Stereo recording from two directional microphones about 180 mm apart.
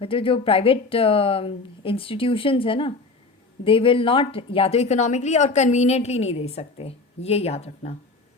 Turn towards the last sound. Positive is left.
turn(degrees=35)  # may be behind; listen again after turning